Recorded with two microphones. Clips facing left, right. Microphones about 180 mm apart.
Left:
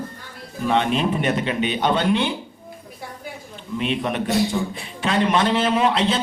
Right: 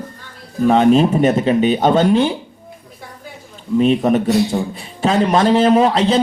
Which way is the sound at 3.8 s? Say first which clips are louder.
Right 9 dB; 40° right (ahead or behind).